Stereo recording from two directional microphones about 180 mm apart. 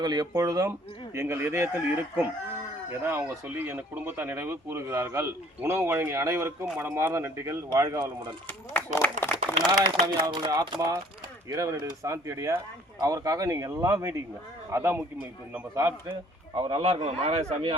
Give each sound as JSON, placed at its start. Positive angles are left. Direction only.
{"t": 0.0, "sound": "speech", "side_deg": -20}
{"t": 8.4, "sound": "speech", "side_deg": 10}
{"t": 9.6, "sound": "speech", "side_deg": -25}